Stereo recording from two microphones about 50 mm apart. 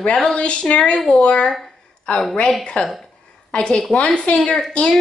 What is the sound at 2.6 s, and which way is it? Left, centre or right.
Speech, centre.